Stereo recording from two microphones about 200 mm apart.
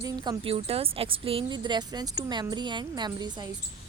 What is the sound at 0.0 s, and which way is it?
A woman's voice, 25° right (ahead or behind).